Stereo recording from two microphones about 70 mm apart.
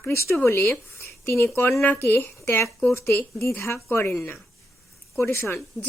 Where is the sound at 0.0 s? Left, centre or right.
Left.